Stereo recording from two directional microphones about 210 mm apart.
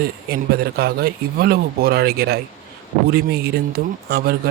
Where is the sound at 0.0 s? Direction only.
45° right (ahead or behind).